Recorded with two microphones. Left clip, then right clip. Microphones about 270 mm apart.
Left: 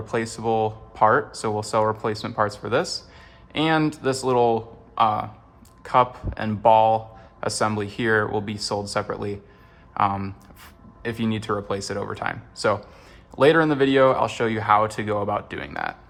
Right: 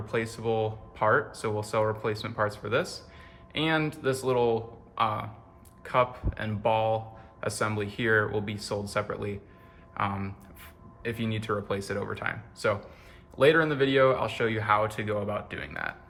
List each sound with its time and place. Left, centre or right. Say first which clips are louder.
0.0 s speech: left 5 dB; centre